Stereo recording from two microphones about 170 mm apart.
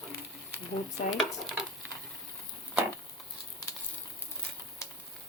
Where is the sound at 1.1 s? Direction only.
Centre (ahead or behind).